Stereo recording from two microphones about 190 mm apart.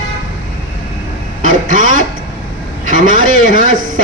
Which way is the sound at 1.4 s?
45° right (ahead or behind).